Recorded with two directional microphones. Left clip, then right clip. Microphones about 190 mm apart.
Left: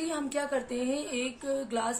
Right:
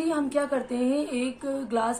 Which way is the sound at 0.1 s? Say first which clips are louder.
Right 5 dB; 10° left (ahead or behind).